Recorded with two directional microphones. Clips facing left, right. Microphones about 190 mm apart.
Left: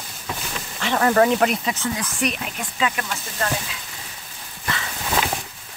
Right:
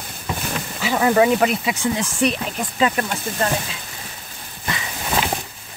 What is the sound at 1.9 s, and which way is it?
Speech, 30° right (ahead or behind).